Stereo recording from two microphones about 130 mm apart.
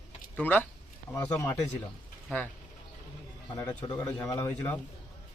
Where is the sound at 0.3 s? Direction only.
15° left (ahead or behind).